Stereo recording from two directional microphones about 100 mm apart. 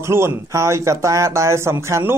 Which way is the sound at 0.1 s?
25° right (ahead or behind).